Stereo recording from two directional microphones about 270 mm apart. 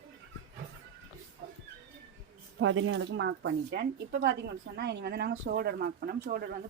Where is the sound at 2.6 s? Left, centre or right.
Right.